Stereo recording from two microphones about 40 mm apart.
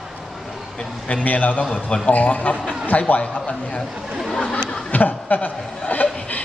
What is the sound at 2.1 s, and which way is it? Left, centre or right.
Speech, left.